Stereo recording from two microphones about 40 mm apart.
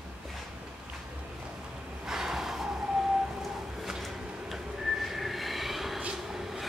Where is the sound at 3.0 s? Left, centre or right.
Centre.